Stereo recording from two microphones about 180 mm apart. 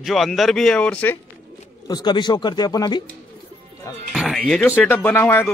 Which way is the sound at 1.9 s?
25° left (ahead or behind).